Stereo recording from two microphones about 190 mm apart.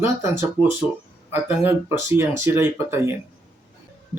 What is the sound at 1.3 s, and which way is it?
Speech, 10° right (ahead or behind).